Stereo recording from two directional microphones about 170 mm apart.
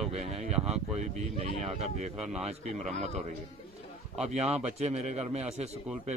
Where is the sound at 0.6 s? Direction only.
5° right (ahead or behind).